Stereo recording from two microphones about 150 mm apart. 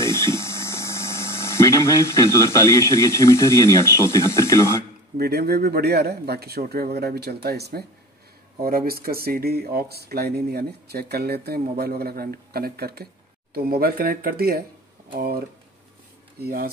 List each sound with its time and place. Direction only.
0.0 s speech: 20° left (ahead or behind)
5.1 s speech: 90° right